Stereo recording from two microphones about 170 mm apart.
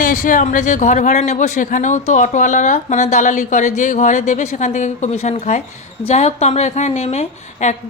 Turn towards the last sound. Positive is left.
turn(degrees=40)  # may be behind; listen again after turning